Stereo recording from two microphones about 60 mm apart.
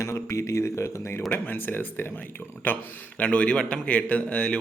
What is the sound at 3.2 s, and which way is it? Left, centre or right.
A man's voice, left.